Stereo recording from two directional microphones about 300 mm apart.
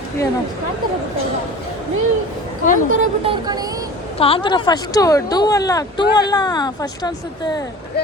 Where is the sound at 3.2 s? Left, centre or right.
Centre.